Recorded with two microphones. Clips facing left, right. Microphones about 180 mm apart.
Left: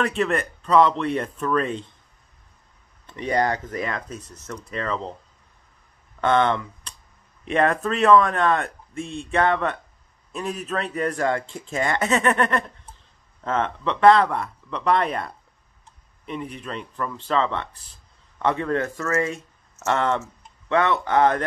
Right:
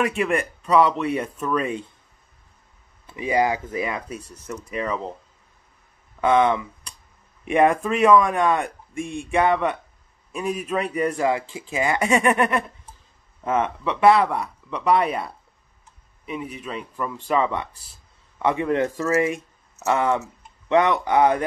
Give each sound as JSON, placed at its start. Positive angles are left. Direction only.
{"t": 0.0, "sound": "speech", "side_deg": -10}
{"t": 3.1, "sound": "speech", "side_deg": -10}
{"t": 6.2, "sound": "speech", "side_deg": -5}